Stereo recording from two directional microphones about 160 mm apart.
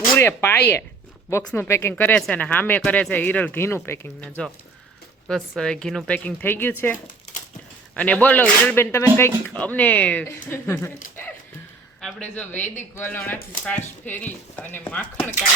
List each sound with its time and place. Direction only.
0.2 s speech: 15° left (ahead or behind)
7.9 s speech: 10° left (ahead or behind)
11.9 s speech: 5° left (ahead or behind)